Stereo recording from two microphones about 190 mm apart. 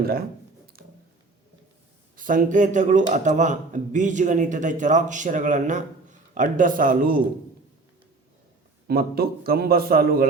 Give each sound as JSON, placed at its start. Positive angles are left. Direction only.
{"t": 0.0, "sound": "a man's voice", "side_deg": -50}
{"t": 2.1, "sound": "a man's voice", "side_deg": -45}
{"t": 8.9, "sound": "a man's voice", "side_deg": -55}